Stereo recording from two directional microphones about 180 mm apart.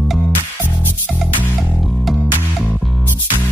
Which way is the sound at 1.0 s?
Centre (ahead or behind).